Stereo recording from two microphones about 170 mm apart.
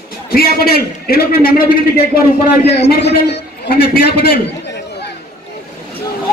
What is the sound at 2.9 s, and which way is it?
A man's voice, 75° left (ahead or behind).